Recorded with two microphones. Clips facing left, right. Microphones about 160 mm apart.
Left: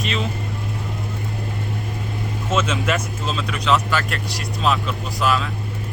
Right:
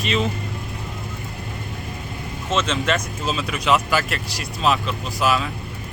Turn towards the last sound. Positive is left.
turn(degrees=-5)  # may be behind; listen again after turning